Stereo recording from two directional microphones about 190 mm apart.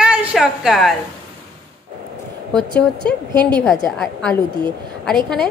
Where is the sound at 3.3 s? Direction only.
20° right (ahead or behind).